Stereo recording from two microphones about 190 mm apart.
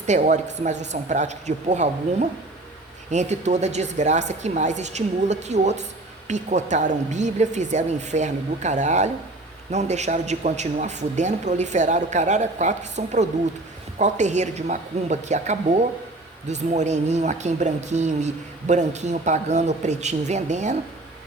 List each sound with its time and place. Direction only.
0.0 s a man's voice: 40° right (ahead or behind)
3.1 s a man's voice: 35° right (ahead or behind)